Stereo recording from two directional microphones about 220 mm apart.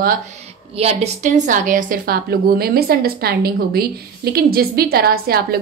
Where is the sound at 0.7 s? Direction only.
30° right (ahead or behind).